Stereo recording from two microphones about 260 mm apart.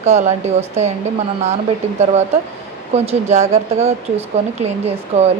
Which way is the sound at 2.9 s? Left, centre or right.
Right.